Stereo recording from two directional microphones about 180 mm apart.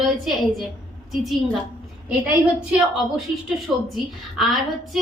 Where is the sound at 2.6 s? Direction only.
5° right (ahead or behind).